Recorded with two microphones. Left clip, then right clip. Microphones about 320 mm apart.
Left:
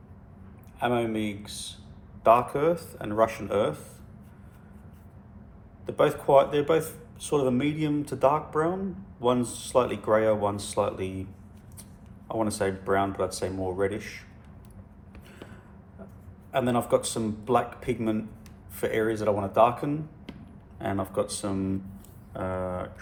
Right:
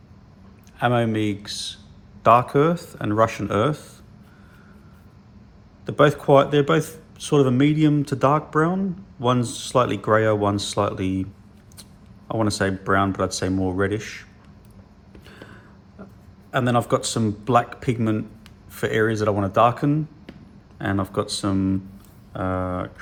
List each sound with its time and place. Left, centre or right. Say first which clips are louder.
0.8 s speech: right 6 dB; right
5.8 s speech: right 6 dB; right
12.3 s speech: right 5 dB; right
16.5 s speech: right 4 dB; right